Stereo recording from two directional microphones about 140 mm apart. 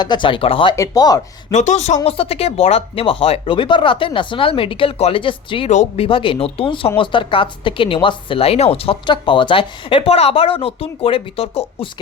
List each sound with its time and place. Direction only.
0.0 s a woman's voice: 35° left (ahead or behind)
0.8 s speech: 25° left (ahead or behind)
1.5 s speech: 55° left (ahead or behind)
2.0 s a woman's voice: 45° left (ahead or behind)
5.6 s a woman's voice: 50° left (ahead or behind)